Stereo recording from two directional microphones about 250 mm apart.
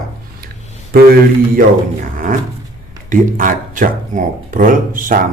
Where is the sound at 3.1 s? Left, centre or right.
Right.